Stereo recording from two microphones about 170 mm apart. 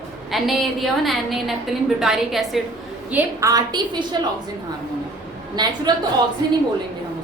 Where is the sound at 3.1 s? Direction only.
20° right (ahead or behind).